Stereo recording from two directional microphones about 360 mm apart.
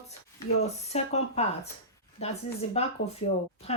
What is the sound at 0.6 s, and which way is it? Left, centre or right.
Speech, centre.